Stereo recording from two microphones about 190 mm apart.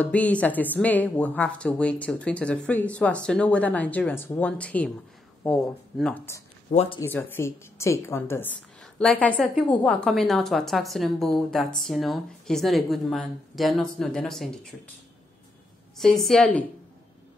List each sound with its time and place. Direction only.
0.0 s speech: 5° left (ahead or behind)
6.7 s speech: 35° left (ahead or behind)
7.0 s a woman's voice: 10° left (ahead or behind)
16.0 s a woman's voice: centre (ahead or behind)